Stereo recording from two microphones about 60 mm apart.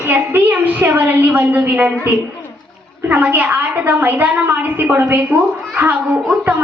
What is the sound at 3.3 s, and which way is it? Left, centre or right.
A woman's voice, right.